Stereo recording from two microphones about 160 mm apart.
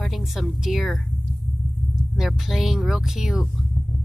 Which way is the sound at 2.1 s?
5° right (ahead or behind).